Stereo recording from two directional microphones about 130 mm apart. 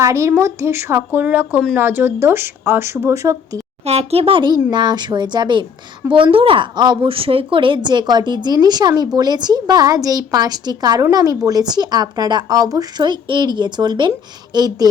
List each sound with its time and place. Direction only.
0.0 s a woman's voice: 20° right (ahead or behind)
3.8 s a woman's voice: 50° right (ahead or behind); by 14.8 s 30° right (ahead or behind)